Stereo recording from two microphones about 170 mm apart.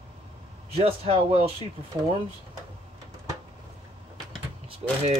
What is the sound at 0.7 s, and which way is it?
Speech, 35° right (ahead or behind).